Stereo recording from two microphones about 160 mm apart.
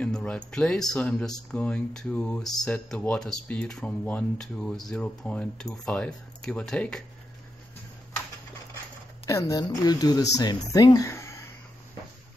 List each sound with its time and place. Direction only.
0.0 s speech: 5° left (ahead or behind)
9.2 s speech: 20° left (ahead or behind)